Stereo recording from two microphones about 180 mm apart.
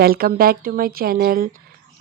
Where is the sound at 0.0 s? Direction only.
55° right (ahead or behind).